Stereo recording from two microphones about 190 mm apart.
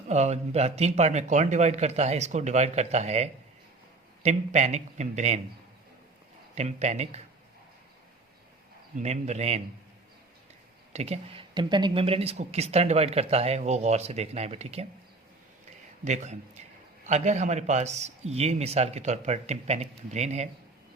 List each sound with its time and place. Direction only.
0.1 s speech: 35° right (ahead or behind)
6.6 s speech: 35° right (ahead or behind)
9.0 s speech: 35° right (ahead or behind)
10.9 s speech: 35° right (ahead or behind)
16.0 s speech: 35° right (ahead or behind)